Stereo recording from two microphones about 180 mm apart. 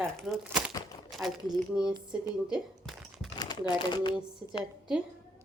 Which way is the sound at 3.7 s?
25° left (ahead or behind).